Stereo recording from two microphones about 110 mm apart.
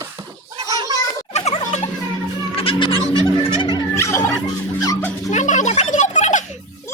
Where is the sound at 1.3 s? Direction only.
90° left.